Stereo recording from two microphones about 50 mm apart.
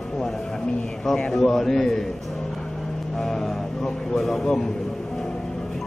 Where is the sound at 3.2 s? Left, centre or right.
Centre.